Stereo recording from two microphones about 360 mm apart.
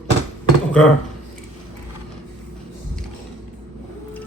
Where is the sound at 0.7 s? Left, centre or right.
Centre.